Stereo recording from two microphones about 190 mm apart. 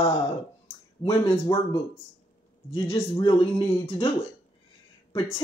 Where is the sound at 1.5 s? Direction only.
20° left (ahead or behind).